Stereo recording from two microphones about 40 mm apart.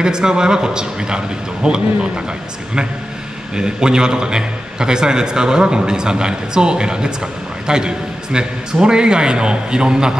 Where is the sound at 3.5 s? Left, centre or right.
Centre.